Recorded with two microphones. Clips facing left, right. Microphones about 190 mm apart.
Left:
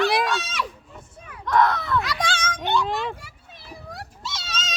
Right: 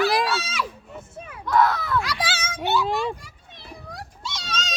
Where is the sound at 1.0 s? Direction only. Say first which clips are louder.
Right 9 dB; 25° right (ahead or behind).